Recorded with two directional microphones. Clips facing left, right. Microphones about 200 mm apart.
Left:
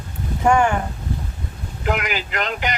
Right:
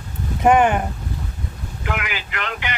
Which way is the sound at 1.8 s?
40° left (ahead or behind).